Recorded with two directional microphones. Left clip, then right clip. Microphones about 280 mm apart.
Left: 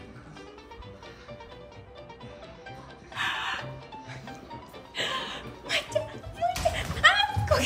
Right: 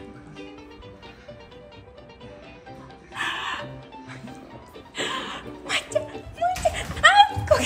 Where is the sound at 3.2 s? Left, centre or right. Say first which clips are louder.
Right 2 dB; centre.